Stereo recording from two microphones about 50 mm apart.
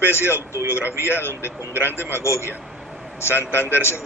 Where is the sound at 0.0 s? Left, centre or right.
Left.